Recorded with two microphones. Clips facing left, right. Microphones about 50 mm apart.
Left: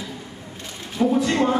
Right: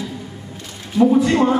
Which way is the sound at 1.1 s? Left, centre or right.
Centre.